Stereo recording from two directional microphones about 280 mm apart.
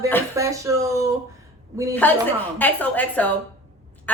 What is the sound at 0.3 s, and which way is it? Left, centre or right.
Speech, centre.